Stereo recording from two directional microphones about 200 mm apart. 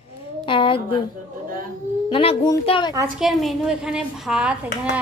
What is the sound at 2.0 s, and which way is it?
Speech, 25° left (ahead or behind).